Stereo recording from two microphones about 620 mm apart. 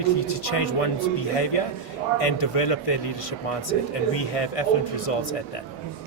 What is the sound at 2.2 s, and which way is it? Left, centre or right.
Speech, left.